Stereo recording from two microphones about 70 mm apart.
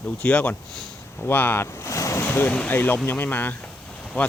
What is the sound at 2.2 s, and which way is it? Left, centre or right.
Speech, left.